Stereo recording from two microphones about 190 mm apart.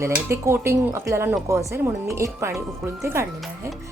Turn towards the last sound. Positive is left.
turn(degrees=-15)  # may be behind; listen again after turning